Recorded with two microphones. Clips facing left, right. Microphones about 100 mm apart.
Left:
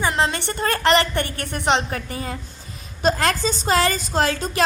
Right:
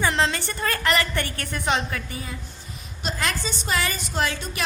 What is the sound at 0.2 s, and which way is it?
A woman's voice, 25° left (ahead or behind).